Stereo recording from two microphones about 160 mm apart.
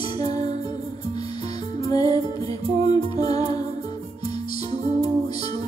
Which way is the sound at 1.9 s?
25° left (ahead or behind).